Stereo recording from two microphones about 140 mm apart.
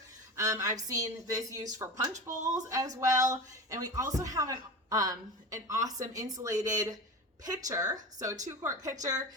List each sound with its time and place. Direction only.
0.3 s a woman's voice: 25° right (ahead or behind)